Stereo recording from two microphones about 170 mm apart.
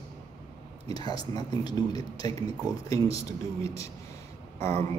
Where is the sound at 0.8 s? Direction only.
25° left (ahead or behind).